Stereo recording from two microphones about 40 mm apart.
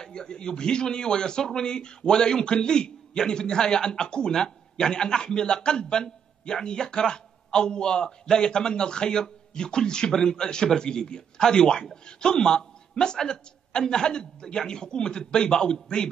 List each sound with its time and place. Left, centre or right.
0.0 s a man's voice: centre